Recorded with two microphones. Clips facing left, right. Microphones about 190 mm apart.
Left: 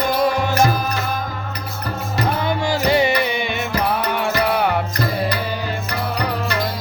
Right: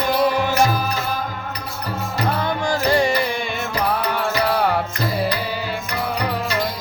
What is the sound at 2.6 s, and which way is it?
Music, 5° left (ahead or behind).